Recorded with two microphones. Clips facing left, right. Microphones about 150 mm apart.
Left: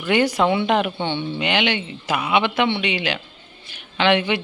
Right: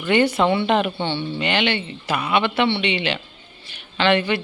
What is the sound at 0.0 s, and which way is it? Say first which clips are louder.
Speech: right 1 dB; 5° left (ahead or behind).